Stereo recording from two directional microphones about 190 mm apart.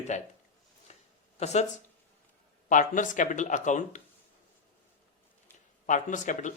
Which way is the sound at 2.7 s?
45° left (ahead or behind).